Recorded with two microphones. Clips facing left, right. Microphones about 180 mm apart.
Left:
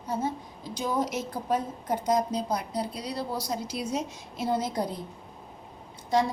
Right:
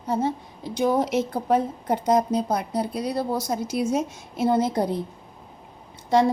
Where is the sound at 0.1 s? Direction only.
65° right (ahead or behind).